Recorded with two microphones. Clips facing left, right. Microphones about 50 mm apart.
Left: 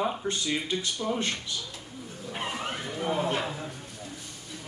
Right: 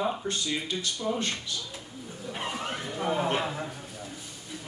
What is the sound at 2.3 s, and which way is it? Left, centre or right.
Vehicle, centre.